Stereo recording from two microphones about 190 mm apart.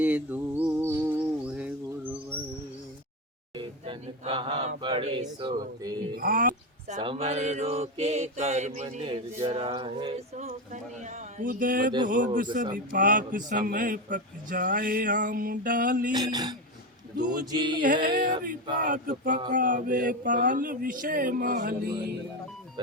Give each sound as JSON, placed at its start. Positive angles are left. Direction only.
{"t": 0.0, "sound": "music", "side_deg": -10}
{"t": 3.6, "sound": "speech", "side_deg": -25}
{"t": 5.4, "sound": "mantra", "side_deg": -25}
{"t": 6.1, "sound": "a sound", "side_deg": -50}
{"t": 7.0, "sound": "mantra", "side_deg": -30}
{"t": 10.2, "sound": "mantra", "side_deg": -40}
{"t": 11.0, "sound": "a man's voice", "side_deg": -45}
{"t": 16.1, "sound": "mantra", "side_deg": -20}
{"t": 17.2, "sound": "a man's voice", "side_deg": -50}
{"t": 17.4, "sound": "mantra", "side_deg": -20}
{"t": 18.8, "sound": "a man's voice", "side_deg": -45}